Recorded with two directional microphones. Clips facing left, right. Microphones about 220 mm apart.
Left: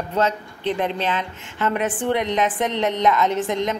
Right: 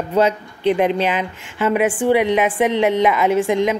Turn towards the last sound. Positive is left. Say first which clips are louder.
# right 6 dB
turn(degrees=-10)  # may be behind; listen again after turning